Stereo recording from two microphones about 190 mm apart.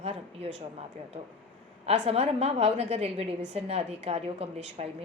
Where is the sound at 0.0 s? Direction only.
30° right (ahead or behind).